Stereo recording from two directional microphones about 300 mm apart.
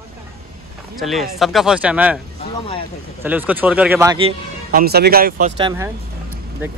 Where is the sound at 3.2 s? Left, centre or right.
Centre.